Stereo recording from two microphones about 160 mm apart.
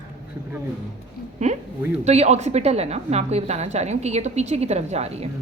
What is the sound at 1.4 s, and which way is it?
A woman's voice, 45° right (ahead or behind).